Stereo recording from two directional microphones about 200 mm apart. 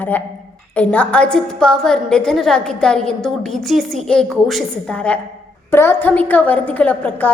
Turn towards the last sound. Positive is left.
turn(degrees=10)  # may be behind; listen again after turning